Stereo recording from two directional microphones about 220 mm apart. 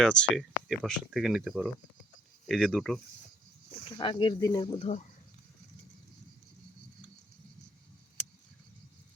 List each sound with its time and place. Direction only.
0.0 s speech: 5° left (ahead or behind)
3.7 s speech: 25° left (ahead or behind)